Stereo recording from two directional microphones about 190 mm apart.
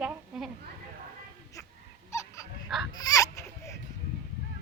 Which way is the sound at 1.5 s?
15° left (ahead or behind).